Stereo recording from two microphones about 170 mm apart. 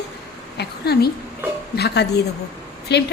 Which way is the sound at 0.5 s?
70° left (ahead or behind).